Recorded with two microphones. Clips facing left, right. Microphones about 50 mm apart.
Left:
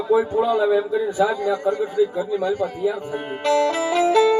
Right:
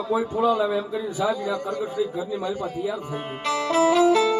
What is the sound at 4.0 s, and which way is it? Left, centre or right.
Music, left.